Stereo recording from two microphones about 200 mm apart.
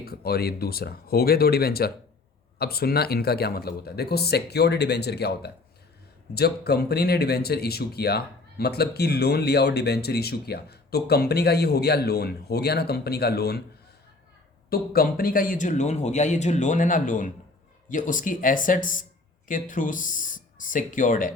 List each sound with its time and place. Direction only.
0.0 s speech: 50° left (ahead or behind)
14.7 s speech: 45° left (ahead or behind)